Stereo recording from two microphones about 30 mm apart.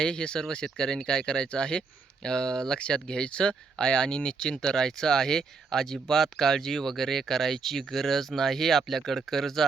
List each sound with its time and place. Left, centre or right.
0.0 s speech: left; by 9.6 s centre